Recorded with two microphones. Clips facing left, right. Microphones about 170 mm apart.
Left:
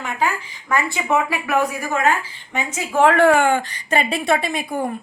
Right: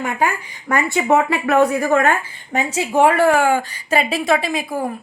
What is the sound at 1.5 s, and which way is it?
A woman's voice, 65° right (ahead or behind).